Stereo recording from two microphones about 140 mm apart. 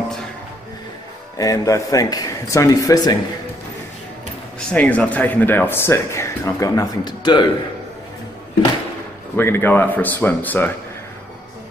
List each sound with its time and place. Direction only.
1.4 s a man's voice: 25° left (ahead or behind)
4.6 s speech: 10° left (ahead or behind); by 7.4 s 30° left (ahead or behind)
9.4 s speech: 15° left (ahead or behind)